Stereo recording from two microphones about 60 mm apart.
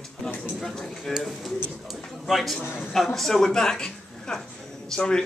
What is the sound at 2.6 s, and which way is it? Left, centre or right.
Speech, left.